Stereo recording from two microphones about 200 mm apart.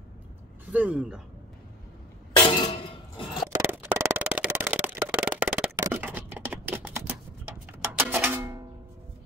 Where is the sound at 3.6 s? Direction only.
10° right (ahead or behind).